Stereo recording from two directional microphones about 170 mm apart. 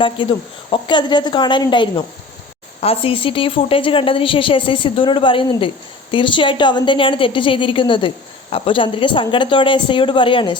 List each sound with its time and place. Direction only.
0.0 s a woman's voice: 30° left (ahead or behind)